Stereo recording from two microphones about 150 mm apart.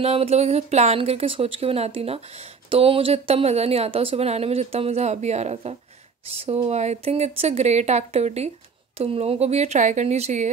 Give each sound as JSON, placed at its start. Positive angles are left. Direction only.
{"t": 0.0, "sound": "speech", "side_deg": -40}